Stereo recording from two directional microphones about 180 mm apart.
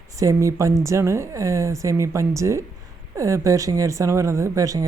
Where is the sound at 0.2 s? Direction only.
15° right (ahead or behind).